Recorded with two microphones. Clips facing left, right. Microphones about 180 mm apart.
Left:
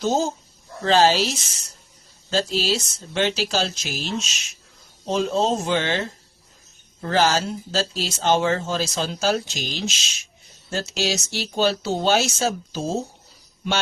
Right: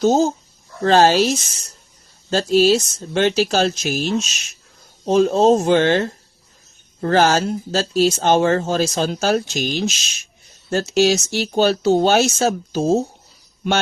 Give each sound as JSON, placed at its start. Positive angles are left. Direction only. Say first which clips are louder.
{"t": 0.0, "sound": "speech", "louder": "right 6 dB", "side_deg": -45}